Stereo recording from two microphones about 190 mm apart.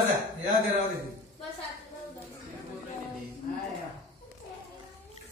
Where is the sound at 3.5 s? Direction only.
40° left (ahead or behind).